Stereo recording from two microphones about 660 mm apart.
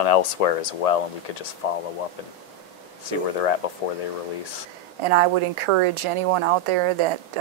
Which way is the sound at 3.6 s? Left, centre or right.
Left.